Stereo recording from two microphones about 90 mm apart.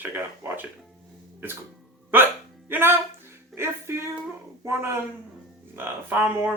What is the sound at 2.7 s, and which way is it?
Speech, 25° right (ahead or behind).